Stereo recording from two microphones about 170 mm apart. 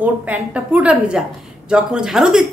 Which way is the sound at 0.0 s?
10° right (ahead or behind).